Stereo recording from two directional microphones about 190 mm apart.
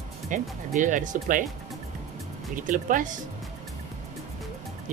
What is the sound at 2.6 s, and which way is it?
Speech, 45° right (ahead or behind).